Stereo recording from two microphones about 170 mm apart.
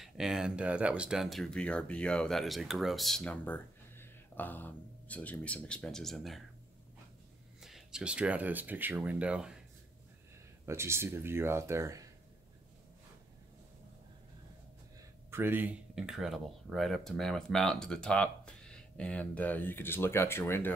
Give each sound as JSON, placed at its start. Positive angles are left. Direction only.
{"t": 0.0, "sound": "speech", "side_deg": -5}
{"t": 7.6, "sound": "speech", "side_deg": -5}
{"t": 10.6, "sound": "speech", "side_deg": -15}
{"t": 15.3, "sound": "speech", "side_deg": -10}